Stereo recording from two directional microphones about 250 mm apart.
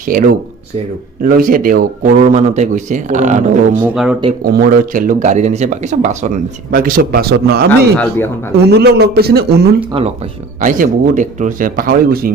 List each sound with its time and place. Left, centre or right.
0.0 s speech: right
3.8 s speech: centre
4.5 s speech: right
8.6 s speech: right